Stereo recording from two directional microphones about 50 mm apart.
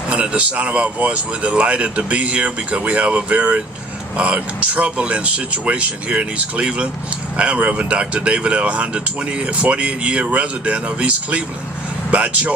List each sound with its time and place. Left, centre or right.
0.1 s speech: right